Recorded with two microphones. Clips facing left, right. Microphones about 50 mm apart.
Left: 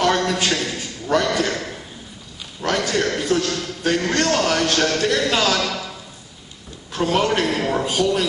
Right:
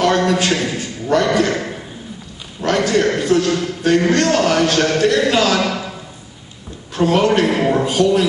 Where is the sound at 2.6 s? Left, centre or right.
Centre.